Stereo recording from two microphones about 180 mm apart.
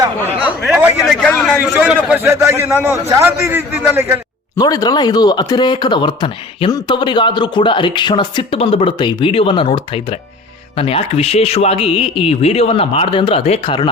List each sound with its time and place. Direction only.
0.6 s a man's voice: 5° right (ahead or behind)
4.5 s a man's voice: 20° left (ahead or behind)